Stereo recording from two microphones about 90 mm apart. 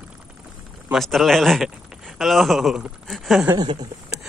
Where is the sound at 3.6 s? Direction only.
55° right (ahead or behind).